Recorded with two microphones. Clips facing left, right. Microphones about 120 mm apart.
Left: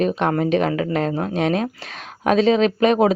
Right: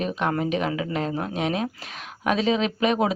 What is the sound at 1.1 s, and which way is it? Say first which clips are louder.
Speech: left 5 dB; 30° left (ahead or behind).